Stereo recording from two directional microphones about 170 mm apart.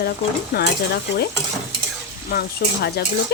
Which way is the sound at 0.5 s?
70° left (ahead or behind).